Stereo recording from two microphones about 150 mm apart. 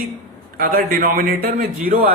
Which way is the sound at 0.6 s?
70° right (ahead or behind).